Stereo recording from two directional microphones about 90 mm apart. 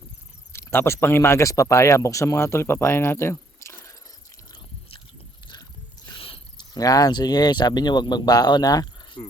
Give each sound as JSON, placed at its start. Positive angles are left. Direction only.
{"t": 0.7, "sound": "speech", "side_deg": 25}
{"t": 6.1, "sound": "cricket", "side_deg": 85}
{"t": 6.6, "sound": "speech", "side_deg": 45}